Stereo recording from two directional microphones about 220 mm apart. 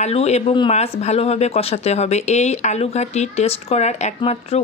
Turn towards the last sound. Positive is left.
turn(degrees=25)  # may be behind; listen again after turning